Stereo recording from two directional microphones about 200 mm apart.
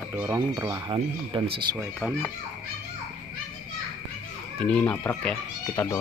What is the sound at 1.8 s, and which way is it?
Speech, 5° right (ahead or behind).